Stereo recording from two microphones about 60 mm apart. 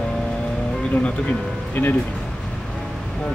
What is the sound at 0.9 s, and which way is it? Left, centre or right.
Speech, centre.